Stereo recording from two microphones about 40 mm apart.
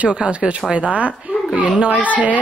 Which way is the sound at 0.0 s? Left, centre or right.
Right.